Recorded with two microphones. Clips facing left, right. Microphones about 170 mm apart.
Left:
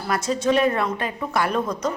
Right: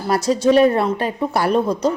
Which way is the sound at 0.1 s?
35° right (ahead or behind).